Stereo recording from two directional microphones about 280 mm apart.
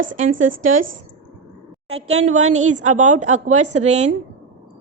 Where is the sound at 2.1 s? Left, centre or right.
Right.